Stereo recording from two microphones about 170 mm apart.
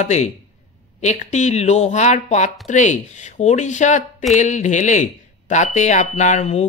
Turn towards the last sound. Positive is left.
turn(degrees=40)  # may be behind; listen again after turning